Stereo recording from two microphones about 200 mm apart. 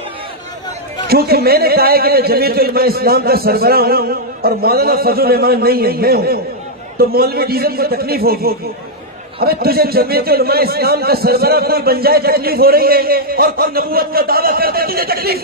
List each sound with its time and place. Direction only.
1.0 s speech: 50° right (ahead or behind)